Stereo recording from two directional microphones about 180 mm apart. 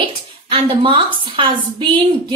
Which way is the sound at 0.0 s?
30° right (ahead or behind).